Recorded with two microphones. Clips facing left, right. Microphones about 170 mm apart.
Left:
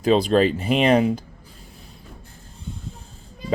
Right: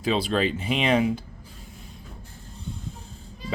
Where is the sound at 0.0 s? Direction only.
40° left (ahead or behind).